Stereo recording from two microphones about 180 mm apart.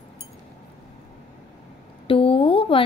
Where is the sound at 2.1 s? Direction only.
30° left (ahead or behind).